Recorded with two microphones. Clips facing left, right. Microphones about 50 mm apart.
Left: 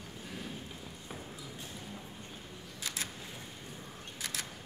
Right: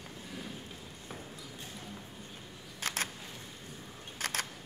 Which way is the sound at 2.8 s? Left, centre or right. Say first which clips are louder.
Right 5 dB; right.